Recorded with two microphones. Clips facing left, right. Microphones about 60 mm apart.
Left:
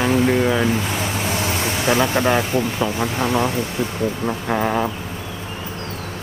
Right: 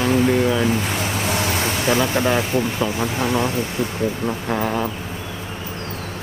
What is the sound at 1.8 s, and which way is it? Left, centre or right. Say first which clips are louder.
Speech: left 2 dB; left.